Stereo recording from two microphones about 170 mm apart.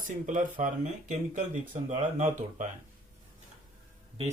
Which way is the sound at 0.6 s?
50° right (ahead or behind).